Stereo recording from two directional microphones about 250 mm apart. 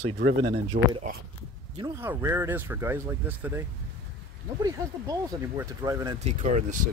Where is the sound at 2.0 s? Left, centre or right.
Centre.